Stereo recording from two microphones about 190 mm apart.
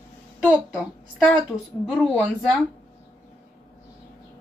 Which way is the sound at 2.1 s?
Centre (ahead or behind).